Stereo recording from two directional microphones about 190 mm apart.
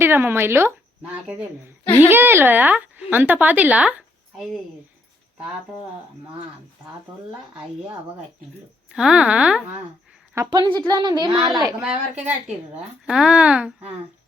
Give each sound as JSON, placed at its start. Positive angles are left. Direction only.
{"t": 0.0, "sound": "a woman's voice", "side_deg": -10}
{"t": 9.0, "sound": "speech", "side_deg": -5}
{"t": 10.3, "sound": "a woman's voice", "side_deg": -20}
{"t": 11.8, "sound": "a woman's voice", "side_deg": -5}